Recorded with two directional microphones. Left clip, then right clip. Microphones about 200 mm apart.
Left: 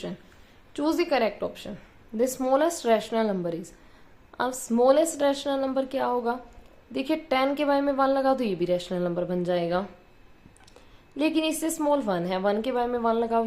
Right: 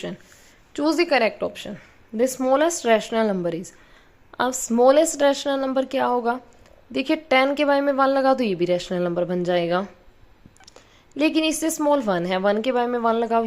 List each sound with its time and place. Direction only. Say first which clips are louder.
0.7 s a woman's voice: right 5 dB; 30° right (ahead or behind)